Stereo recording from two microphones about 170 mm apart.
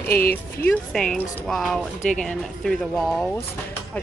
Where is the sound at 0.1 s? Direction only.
60° left (ahead or behind).